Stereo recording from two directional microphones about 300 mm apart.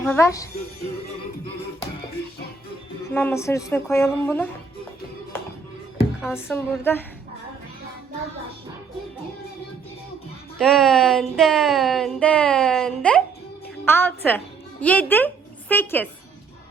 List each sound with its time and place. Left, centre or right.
0.0 s a woman's voice: centre
3.1 s a woman's voice: centre
6.3 s a woman's voice: centre
10.6 s a woman's voice: centre